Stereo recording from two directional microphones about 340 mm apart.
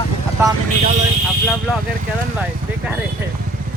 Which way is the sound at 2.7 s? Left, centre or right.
Centre.